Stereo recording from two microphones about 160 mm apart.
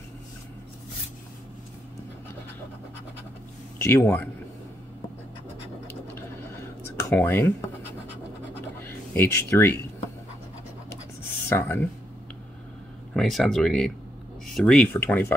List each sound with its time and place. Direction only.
3.7 s a man's voice: 15° left (ahead or behind)
7.0 s speech: 10° left (ahead or behind)
8.8 s speech: 15° left (ahead or behind)
11.4 s speech: 15° left (ahead or behind)
13.1 s speech: centre (ahead or behind)